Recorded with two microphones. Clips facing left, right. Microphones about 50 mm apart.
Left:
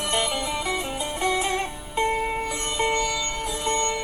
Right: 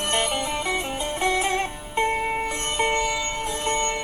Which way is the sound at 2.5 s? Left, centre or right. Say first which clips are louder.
Right 1 dB; right.